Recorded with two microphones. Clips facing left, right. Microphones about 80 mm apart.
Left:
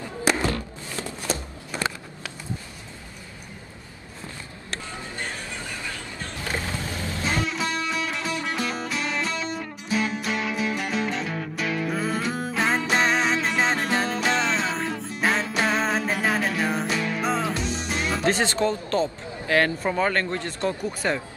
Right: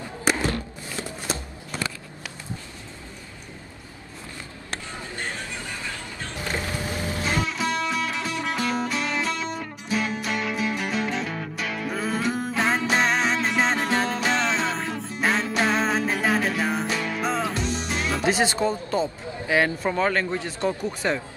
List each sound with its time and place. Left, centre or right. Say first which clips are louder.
6.3 s boat: right 1 dB; right
7.4 s music: right 1 dB; centre
18.3 s speech: right 2 dB; centre
19.8 s speech: even; centre